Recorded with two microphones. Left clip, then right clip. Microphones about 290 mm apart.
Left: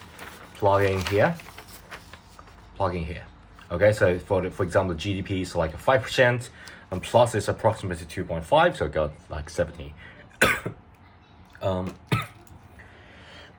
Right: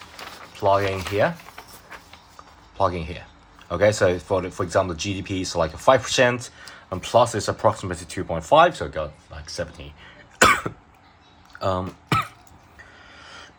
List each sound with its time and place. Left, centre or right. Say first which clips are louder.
0.6 s speech: right 1 dB; centre
2.7 s speech: right 5 dB; centre
11.6 s burping: right 3 dB; centre